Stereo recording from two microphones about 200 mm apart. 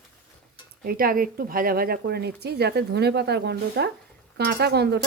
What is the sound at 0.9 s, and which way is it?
Speech, 45° right (ahead or behind).